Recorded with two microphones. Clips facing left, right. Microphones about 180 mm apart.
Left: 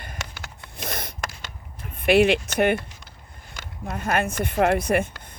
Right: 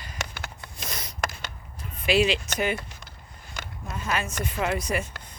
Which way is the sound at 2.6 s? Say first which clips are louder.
Left 9 dB; 60° left (ahead or behind).